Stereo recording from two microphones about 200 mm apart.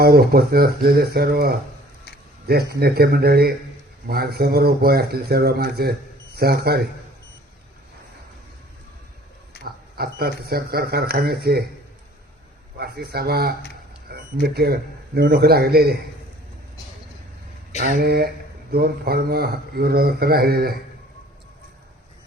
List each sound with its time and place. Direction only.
0.0 s a man's voice: 50° right (ahead or behind)
9.6 s a man's voice: 50° right (ahead or behind)
12.8 s a man's voice: 50° right (ahead or behind)
17.9 s a man's voice: 50° right (ahead or behind)